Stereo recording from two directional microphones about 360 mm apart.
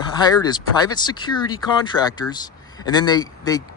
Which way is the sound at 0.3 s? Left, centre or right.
Centre.